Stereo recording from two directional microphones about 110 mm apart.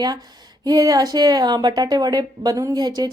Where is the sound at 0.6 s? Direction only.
35° right (ahead or behind).